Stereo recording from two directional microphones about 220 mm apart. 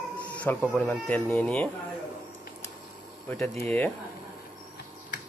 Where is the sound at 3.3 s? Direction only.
5° left (ahead or behind).